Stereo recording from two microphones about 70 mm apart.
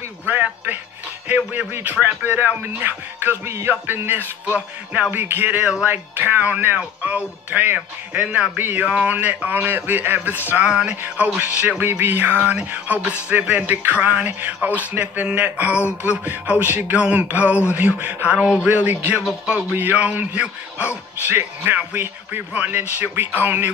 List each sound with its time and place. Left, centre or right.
0.3 s a sound: right
1.3 s speech: right
4.6 s speech: centre
5.1 s speech: right
5.6 s speech: centre
5.9 s speech: right
10.6 s speech: centre
11.8 s speech: right
19.1 s speech: centre
19.7 s speech: right
21.3 s speech: right